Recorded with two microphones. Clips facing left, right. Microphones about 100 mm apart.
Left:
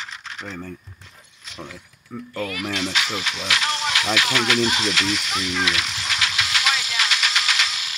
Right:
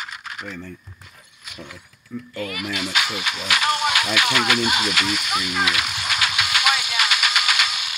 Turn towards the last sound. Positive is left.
turn(degrees=-5)  # may be behind; listen again after turning